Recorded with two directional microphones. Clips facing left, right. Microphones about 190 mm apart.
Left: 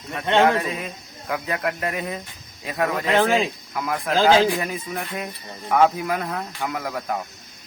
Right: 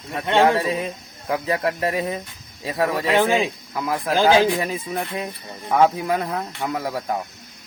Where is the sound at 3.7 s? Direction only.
25° right (ahead or behind).